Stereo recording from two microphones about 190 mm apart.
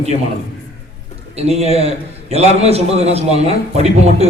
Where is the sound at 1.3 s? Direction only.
35° right (ahead or behind).